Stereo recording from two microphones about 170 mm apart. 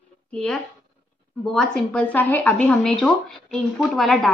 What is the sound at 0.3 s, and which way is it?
A woman's voice, 5° left (ahead or behind).